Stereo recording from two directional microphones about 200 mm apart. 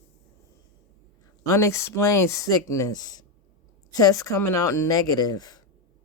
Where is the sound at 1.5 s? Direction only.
15° left (ahead or behind).